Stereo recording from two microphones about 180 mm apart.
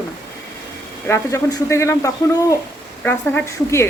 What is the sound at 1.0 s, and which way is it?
Speech, 15° left (ahead or behind).